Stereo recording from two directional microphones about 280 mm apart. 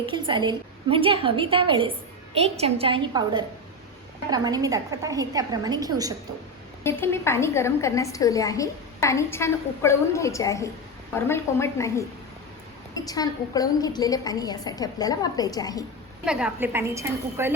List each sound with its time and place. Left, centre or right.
0.0 s a woman's voice: centre
6.8 s a woman's voice: centre
13.1 s a woman's voice: centre
16.2 s a woman's voice: centre